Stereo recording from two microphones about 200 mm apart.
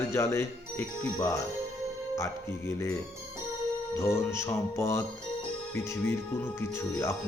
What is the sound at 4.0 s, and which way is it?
Speech, 15° left (ahead or behind).